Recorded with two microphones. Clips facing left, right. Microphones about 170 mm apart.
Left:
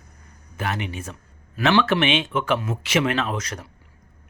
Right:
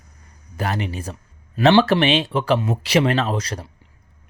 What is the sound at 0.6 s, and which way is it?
Speech, 35° right (ahead or behind).